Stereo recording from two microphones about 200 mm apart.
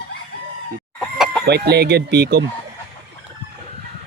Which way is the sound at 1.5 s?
55° right (ahead or behind).